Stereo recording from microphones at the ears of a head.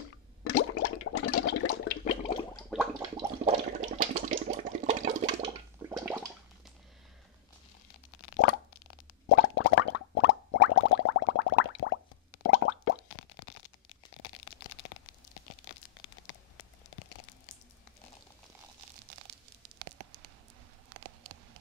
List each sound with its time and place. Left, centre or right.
0.0 s a sound: left
3.2 s water: right
7.9 s plop: left
14.1 s tearing: left
18.8 s tearing: right
20.9 s a sound: right